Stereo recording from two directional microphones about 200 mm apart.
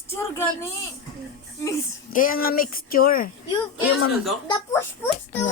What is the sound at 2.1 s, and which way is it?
Speech, 45° left (ahead or behind).